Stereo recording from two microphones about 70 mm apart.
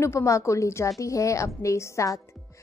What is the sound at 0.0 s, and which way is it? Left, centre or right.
Speech, left.